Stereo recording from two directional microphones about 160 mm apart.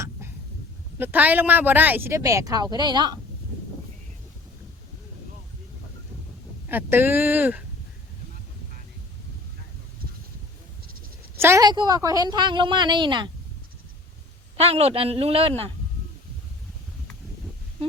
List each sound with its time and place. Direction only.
0.0 s a sound: 15° right (ahead or behind)
0.9 s speech: 10° right (ahead or behind); by 3.2 s 25° right (ahead or behind)
6.7 s speech: 10° right (ahead or behind)
11.3 s a woman's voice: 15° right (ahead or behind)
14.5 s a woman's voice: 40° right (ahead or behind)